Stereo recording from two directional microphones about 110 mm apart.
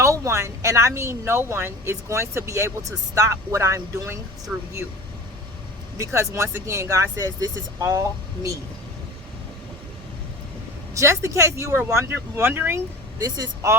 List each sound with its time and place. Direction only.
0.0 s speech: 25° right (ahead or behind)
4.5 s speech: 5° right (ahead or behind)
6.1 s speech: 25° right (ahead or behind)
10.9 s speech: 25° right (ahead or behind)
13.1 s speech: 35° right (ahead or behind)